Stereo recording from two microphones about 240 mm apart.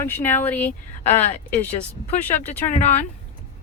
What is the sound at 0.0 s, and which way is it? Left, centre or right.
Speech, centre.